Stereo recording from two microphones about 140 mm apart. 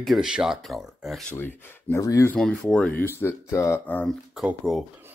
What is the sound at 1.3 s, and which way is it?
Speech, 15° left (ahead or behind).